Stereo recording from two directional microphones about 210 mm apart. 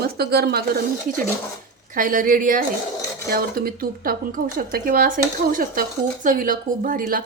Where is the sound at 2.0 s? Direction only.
40° right (ahead or behind).